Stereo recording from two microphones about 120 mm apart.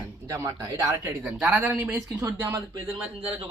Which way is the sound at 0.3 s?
25° right (ahead or behind).